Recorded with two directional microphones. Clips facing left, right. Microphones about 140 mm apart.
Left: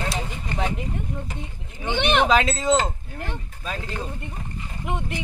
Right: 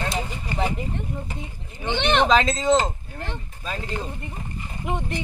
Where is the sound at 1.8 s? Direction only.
10° left (ahead or behind).